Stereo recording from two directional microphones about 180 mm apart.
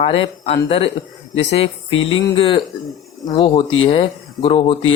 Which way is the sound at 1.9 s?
90° left.